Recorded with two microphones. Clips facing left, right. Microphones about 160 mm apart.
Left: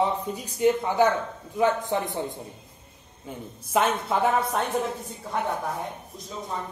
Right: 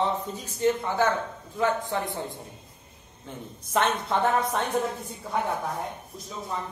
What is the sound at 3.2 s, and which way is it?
Speech, 5° left (ahead or behind).